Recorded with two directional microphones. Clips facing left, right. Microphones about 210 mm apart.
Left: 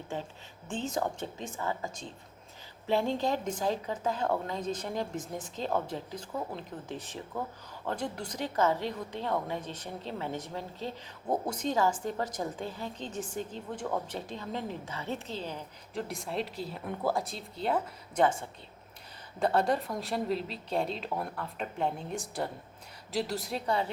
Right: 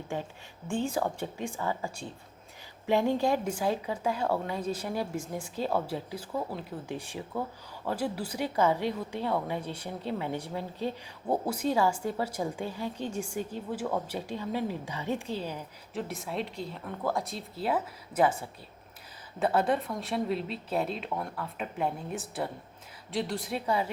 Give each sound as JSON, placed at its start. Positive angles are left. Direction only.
{"t": 0.7, "sound": "a woman's voice", "side_deg": -10}